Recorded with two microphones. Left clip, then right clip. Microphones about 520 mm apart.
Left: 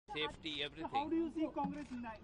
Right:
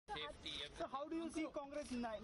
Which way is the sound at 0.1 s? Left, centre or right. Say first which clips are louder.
Left 6 dB; left.